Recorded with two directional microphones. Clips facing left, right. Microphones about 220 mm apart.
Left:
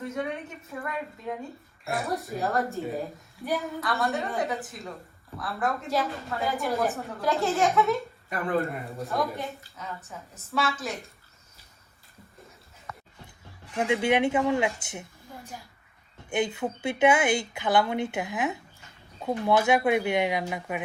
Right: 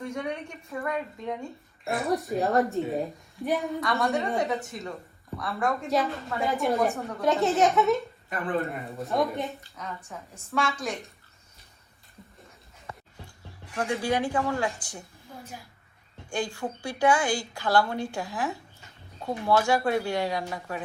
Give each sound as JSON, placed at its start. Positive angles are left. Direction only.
{"t": 0.0, "sound": "a woman's voice", "side_deg": 0}
{"t": 13.7, "sound": "a woman's voice", "side_deg": 20}
{"t": 16.3, "sound": "a woman's voice", "side_deg": 20}